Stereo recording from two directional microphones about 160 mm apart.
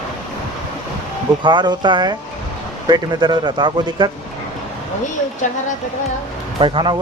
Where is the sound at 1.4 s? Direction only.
30° right (ahead or behind).